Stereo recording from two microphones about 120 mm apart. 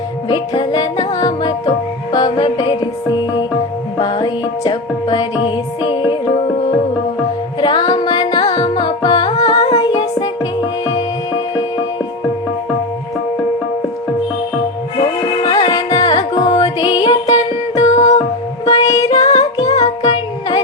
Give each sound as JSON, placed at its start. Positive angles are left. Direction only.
{"t": 0.3, "sound": "music", "side_deg": 35}
{"t": 3.9, "sound": "music", "side_deg": 35}
{"t": 7.6, "sound": "music", "side_deg": 35}
{"t": 15.4, "sound": "carnatic music", "side_deg": 35}
{"t": 17.7, "sound": "music", "side_deg": 30}